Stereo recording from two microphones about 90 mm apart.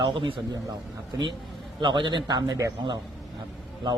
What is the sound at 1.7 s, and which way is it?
A man's voice, 60° right (ahead or behind).